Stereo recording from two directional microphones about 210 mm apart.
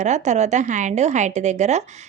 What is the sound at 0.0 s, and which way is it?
A woman's voice, 35° right (ahead or behind).